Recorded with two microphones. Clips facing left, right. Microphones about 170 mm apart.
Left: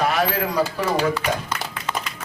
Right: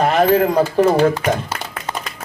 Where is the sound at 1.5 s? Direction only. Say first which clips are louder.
Right 1 dB; 40° right (ahead or behind).